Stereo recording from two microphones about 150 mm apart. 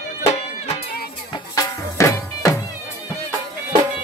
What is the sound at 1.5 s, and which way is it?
Music, 20° left (ahead or behind).